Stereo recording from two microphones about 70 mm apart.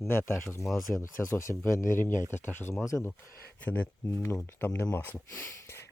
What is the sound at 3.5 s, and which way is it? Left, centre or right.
Speech, left.